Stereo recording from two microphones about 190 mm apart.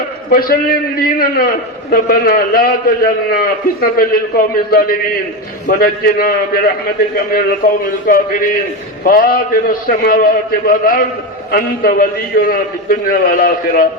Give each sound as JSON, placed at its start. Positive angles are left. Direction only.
{"t": 0.3, "sound": "a man's voice", "side_deg": 50}